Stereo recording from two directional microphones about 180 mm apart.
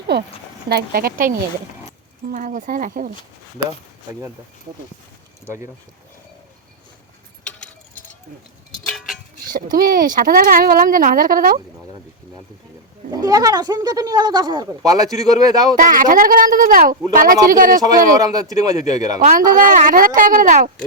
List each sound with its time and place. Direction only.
0.1 s speech: 65° right (ahead or behind)
2.3 s speech: 45° right (ahead or behind)
8.9 s a sound: centre (ahead or behind)
9.5 s speech: 50° right (ahead or behind)
13.1 s speech: 20° right (ahead or behind)
15.7 s speech: 50° right (ahead or behind)
18.2 s speech: 20° right (ahead or behind)
19.3 s speech: 50° right (ahead or behind)